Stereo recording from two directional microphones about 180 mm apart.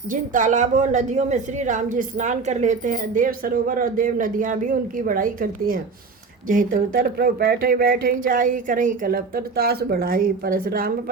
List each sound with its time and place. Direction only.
0.1 s a woman's voice: 45° right (ahead or behind)